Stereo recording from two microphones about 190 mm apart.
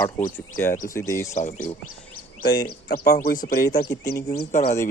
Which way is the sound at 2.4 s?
50° left (ahead or behind).